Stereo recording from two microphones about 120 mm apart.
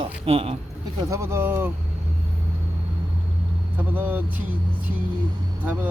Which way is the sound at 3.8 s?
15° right (ahead or behind).